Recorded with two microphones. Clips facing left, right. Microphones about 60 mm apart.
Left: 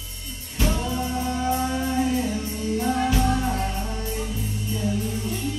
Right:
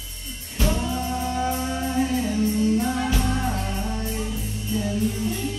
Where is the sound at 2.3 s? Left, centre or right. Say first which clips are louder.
Right 6 dB; left.